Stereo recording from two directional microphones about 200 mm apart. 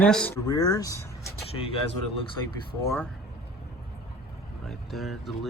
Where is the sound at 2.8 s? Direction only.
15° left (ahead or behind).